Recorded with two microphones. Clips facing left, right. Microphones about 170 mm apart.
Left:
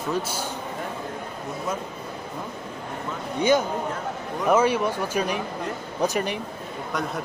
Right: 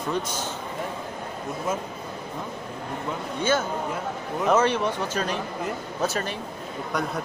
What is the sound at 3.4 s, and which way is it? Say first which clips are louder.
Speech: left 4 dB; 15° left (ahead or behind).